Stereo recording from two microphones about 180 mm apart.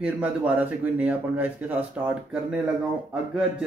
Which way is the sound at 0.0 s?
5° right (ahead or behind).